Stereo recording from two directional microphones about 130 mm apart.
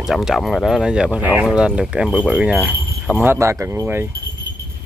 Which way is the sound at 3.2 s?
20° right (ahead or behind).